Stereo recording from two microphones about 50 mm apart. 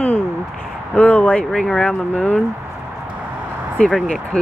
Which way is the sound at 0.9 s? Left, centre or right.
Left.